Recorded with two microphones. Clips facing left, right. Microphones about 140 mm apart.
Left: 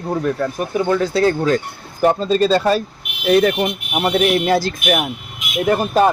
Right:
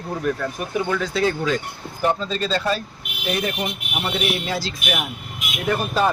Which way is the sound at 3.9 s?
50° left (ahead or behind).